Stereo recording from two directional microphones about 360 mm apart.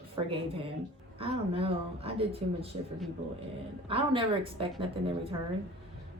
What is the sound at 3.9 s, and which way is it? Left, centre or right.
Speech, centre.